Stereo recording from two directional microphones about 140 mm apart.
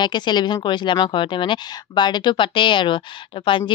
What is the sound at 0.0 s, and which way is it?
Speech, 30° left (ahead or behind).